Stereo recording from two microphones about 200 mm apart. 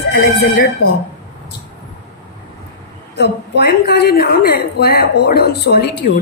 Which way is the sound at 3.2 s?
55° left (ahead or behind).